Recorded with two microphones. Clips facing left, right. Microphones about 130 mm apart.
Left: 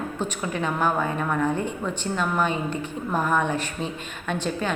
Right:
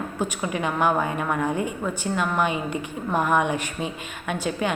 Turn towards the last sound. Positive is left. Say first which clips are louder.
# right 1 dB
turn(degrees=-10)  # may be behind; listen again after turning